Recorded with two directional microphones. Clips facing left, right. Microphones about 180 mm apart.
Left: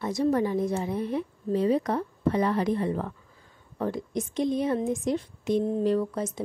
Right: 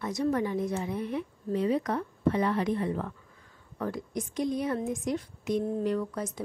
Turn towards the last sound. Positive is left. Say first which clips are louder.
# left 4 dB
turn(degrees=25)  # may be behind; listen again after turning